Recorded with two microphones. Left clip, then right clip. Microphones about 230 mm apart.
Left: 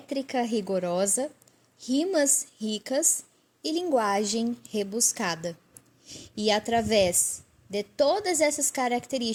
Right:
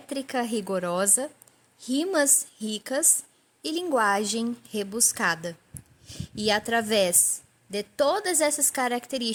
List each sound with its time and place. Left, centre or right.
0.1 s a woman's voice: centre